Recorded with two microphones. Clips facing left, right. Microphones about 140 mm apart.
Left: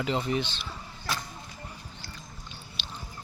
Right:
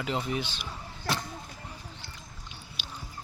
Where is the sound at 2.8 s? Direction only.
10° right (ahead or behind).